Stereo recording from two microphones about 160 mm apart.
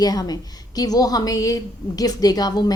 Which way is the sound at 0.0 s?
25° left (ahead or behind).